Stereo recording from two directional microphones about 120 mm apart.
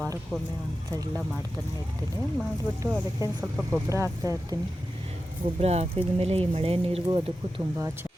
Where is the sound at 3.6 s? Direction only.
5° left (ahead or behind).